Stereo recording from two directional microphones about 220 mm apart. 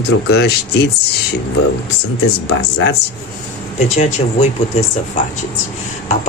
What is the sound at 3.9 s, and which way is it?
Speech, 30° left (ahead or behind).